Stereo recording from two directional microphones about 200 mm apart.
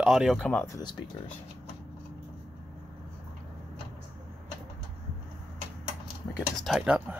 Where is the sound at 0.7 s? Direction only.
20° left (ahead or behind).